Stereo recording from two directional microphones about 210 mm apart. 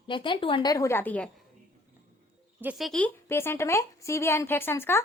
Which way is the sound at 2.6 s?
Centre (ahead or behind).